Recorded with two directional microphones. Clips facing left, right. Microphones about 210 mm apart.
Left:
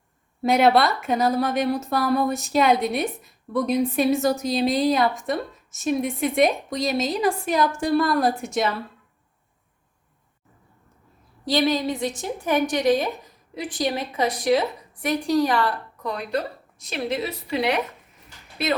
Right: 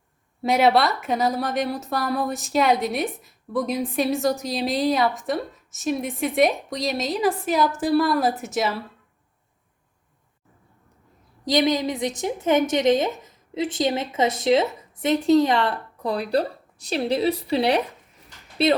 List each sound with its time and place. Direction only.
0.4 s a woman's voice: centre (ahead or behind)
11.4 s a woman's voice: 20° right (ahead or behind)